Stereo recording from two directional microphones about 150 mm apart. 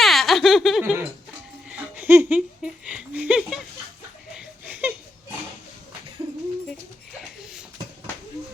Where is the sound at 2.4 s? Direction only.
5° right (ahead or behind).